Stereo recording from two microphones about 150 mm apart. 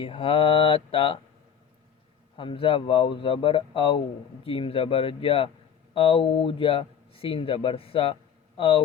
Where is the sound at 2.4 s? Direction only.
35° left (ahead or behind).